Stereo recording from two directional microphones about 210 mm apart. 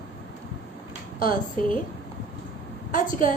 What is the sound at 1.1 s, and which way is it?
Speech, 40° left (ahead or behind).